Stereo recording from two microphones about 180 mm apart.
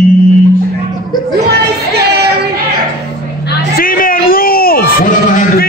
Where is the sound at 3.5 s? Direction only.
55° left (ahead or behind).